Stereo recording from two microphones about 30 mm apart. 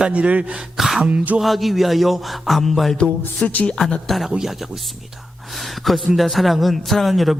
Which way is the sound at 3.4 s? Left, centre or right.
Left.